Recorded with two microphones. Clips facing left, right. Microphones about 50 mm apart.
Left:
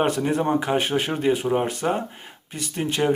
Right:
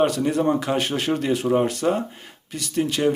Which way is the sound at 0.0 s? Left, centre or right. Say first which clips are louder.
Right 2 dB; left.